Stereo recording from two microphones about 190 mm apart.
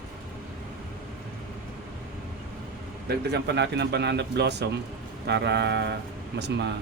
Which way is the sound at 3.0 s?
65° right (ahead or behind).